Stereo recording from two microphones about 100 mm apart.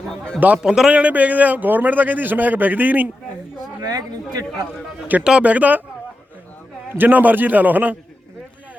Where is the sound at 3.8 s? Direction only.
40° right (ahead or behind).